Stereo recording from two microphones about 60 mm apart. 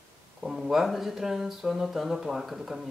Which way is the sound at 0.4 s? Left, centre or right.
Centre.